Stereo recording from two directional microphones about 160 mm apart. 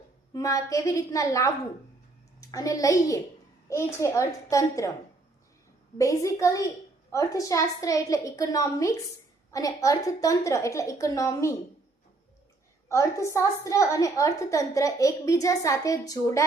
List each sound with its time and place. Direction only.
0.3 s a woman's voice: 20° left (ahead or behind)
6.0 s a woman's voice: 20° left (ahead or behind)
12.9 s a woman's voice: 20° left (ahead or behind)